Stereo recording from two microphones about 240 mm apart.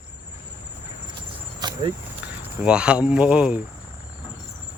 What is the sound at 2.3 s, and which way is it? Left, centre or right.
Speech, centre.